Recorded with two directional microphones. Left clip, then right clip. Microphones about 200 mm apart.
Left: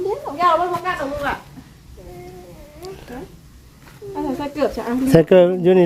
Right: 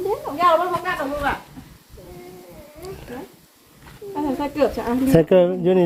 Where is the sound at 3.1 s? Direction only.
10° left (ahead or behind).